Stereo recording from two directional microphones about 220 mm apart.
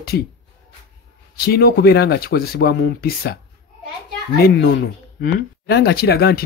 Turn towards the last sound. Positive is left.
turn(degrees=45)  # may be behind; listen again after turning